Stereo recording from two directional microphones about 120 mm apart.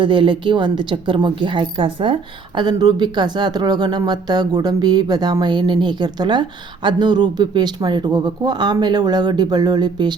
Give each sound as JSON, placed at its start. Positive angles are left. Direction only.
{"t": 0.0, "sound": "a woman's voice", "side_deg": -45}
{"t": 2.6, "sound": "speech", "side_deg": -35}